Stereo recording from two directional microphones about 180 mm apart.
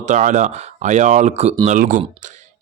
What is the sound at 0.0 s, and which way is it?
A man's voice, 45° right (ahead or behind).